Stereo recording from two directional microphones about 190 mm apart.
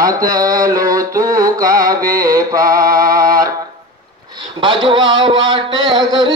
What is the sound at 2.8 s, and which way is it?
Music, 50° right (ahead or behind).